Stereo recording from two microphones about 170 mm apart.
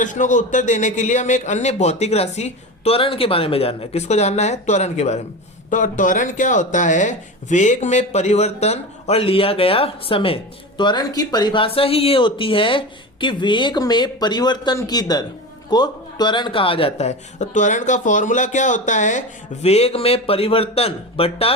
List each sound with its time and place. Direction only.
0.0 s a man's voice: 50° left (ahead or behind)